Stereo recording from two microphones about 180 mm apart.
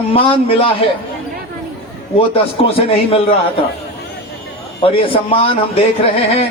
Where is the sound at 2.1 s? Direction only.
30° left (ahead or behind).